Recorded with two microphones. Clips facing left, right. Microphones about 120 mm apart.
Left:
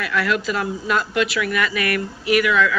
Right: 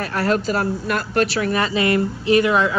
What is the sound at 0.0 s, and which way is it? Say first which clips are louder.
Speech: right 2 dB; 40° right (ahead or behind).